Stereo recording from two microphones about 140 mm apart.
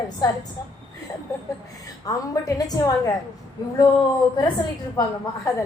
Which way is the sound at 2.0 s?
25° left (ahead or behind).